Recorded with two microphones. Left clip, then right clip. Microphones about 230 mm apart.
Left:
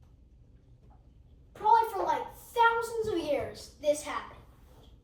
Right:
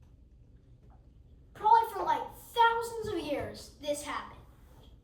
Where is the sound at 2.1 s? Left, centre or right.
Right.